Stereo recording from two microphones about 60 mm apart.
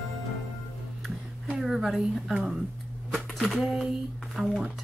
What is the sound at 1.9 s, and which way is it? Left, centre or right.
Speech, centre.